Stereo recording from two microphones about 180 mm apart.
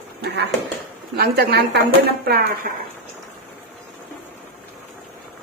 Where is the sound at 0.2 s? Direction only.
65° right (ahead or behind).